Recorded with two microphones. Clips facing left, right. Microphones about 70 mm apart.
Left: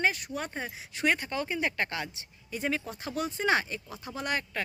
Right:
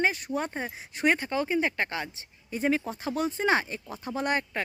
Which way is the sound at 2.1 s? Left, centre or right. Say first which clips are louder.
Right 3 dB; right.